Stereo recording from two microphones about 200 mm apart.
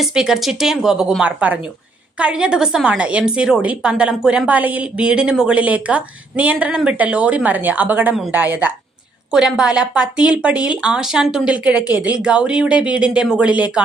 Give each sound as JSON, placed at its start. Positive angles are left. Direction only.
{"t": 0.0, "sound": "a woman's voice", "side_deg": -5}